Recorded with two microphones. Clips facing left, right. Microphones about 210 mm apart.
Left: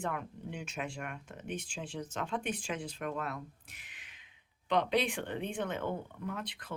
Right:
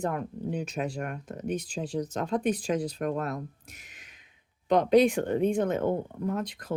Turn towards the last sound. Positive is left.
turn(degrees=-40)  # may be behind; listen again after turning